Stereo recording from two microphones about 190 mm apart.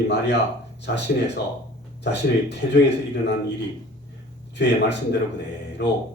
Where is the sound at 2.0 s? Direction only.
65° left (ahead or behind).